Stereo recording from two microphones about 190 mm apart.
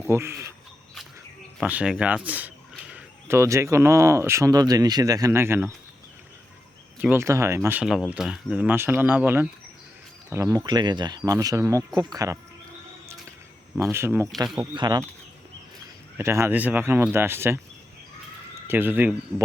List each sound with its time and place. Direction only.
0.0 s speech: 15° right (ahead or behind)
1.6 s speech: 5° right (ahead or behind)
7.0 s speech: 10° right (ahead or behind)
13.9 s speech: 15° right (ahead or behind)
16.1 s speech: 15° right (ahead or behind)
18.7 s speech: 10° right (ahead or behind)